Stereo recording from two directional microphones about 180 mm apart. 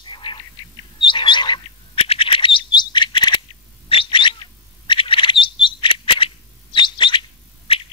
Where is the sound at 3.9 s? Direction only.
30° left (ahead or behind).